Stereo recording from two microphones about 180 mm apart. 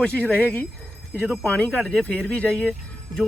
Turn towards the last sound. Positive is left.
turn(degrees=0)  # may be behind; listen again after turning